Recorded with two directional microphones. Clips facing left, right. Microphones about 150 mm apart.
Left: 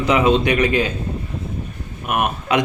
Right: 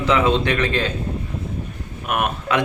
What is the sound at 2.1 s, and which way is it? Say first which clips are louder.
Speech: left 2 dB; 5° left (ahead or behind).